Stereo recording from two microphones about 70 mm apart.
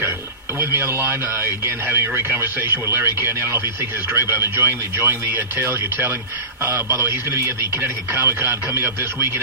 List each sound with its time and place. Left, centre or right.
0.6 s a man's voice: right